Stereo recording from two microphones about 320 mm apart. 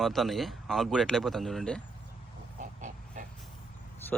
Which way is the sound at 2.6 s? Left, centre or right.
Right.